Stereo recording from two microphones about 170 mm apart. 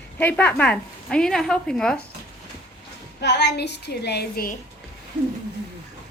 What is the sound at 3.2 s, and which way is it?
A woman's voice, 90° left.